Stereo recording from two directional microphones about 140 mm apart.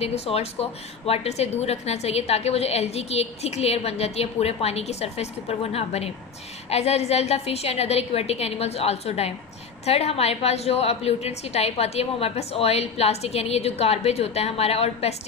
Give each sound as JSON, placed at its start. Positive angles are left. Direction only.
{"t": 0.0, "sound": "a woman's voice", "side_deg": 45}